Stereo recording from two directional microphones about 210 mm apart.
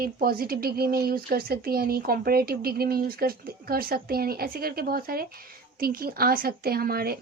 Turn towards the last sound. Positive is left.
turn(degrees=-45)  # may be behind; listen again after turning